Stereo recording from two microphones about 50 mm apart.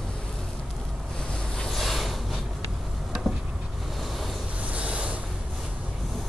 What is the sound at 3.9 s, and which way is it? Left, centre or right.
Waves, centre.